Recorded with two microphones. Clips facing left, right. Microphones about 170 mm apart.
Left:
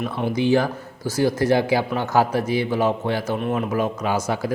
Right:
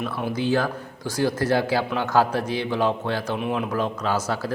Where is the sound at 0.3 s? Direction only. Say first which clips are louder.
Left 4 dB; 15° left (ahead or behind).